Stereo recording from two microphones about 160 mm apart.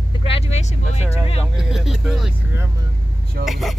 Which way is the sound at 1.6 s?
5° right (ahead or behind).